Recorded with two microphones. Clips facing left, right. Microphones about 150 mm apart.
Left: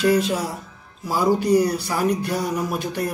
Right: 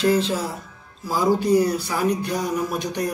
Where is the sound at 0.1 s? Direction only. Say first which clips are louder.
Left 1 dB; 10° left (ahead or behind).